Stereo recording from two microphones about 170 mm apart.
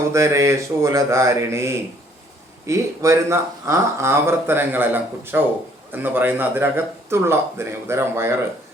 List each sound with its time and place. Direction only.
0.1 s speech: 15° right (ahead or behind)